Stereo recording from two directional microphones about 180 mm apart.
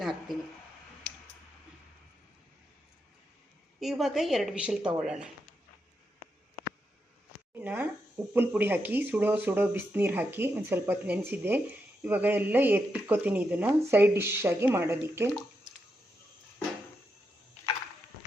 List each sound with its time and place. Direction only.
0.0 s a sound: centre (ahead or behind)
3.8 s a woman's voice: centre (ahead or behind)
7.6 s speech: 10° right (ahead or behind)